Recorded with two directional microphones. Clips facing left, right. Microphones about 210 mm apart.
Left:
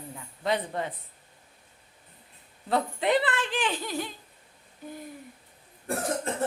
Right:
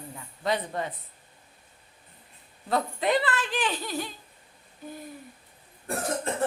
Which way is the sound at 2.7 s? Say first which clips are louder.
Even; 20° left (ahead or behind).